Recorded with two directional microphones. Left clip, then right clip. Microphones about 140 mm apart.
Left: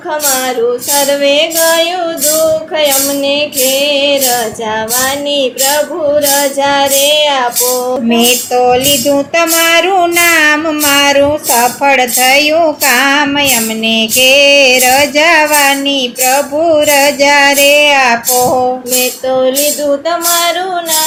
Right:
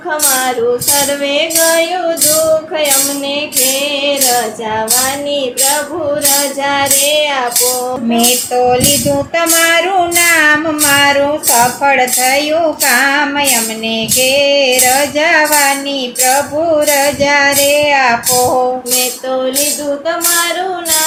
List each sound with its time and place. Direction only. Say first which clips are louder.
0.9 s female singing: left 4 dB; centre (ahead or behind)
6.3 s female singing: left 4 dB; 5° left (ahead or behind)
8.1 s speech: left 2 dB; 40° left (ahead or behind)
18.9 s music: left 4 dB; 5° left (ahead or behind)